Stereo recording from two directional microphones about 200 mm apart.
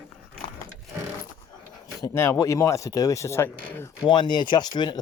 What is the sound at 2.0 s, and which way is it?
Speech, 15° left (ahead or behind).